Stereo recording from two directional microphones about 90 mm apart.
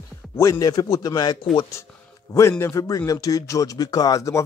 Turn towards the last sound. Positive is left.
turn(degrees=35)  # may be behind; listen again after turning